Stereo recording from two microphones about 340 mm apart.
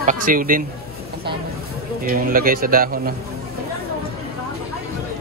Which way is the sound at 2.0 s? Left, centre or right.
Right.